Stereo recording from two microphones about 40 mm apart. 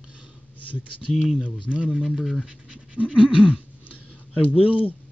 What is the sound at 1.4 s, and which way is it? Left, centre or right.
Speech, right.